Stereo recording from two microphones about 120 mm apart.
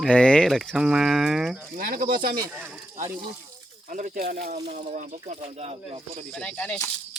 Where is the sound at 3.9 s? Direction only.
90° right.